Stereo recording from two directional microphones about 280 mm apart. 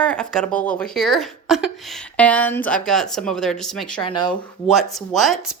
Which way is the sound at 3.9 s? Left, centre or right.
Centre.